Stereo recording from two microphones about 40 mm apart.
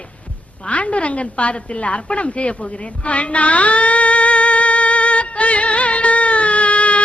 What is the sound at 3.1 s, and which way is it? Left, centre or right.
Music, left.